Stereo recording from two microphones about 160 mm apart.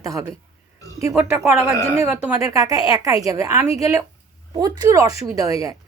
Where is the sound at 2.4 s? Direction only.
20° right (ahead or behind).